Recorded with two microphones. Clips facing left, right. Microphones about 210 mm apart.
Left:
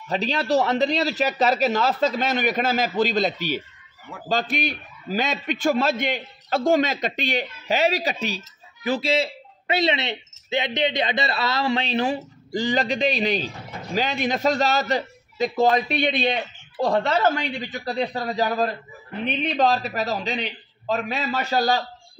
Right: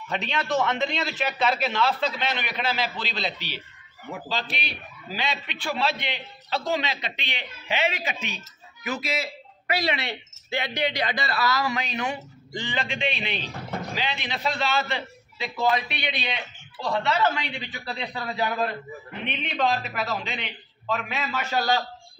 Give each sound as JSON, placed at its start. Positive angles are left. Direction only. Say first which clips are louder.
{"t": 0.1, "sound": "a man's voice", "louder": "left 5 dB", "side_deg": 35}